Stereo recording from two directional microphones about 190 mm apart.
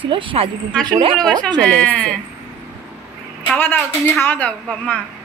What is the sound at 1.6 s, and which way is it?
Speech, 5° left (ahead or behind).